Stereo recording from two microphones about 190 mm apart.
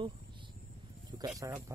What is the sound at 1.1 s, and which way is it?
Speech, 10° right (ahead or behind).